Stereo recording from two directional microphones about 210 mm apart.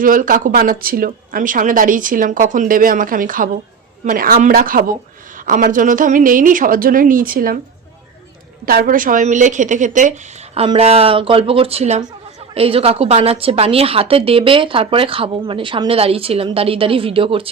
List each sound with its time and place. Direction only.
0.0 s a woman's voice: 40° right (ahead or behind)
8.6 s a woman's voice: 45° right (ahead or behind); by 17.5 s 25° right (ahead or behind)